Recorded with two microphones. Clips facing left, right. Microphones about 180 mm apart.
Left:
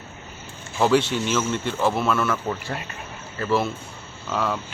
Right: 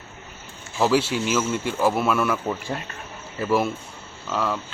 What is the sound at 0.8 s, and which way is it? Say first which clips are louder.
Speech: left 1 dB; 5° right (ahead or behind).